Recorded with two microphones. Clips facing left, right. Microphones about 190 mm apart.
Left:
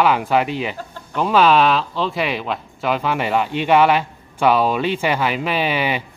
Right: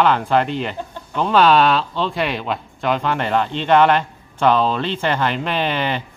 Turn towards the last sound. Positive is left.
turn(degrees=10)  # may be behind; listen again after turning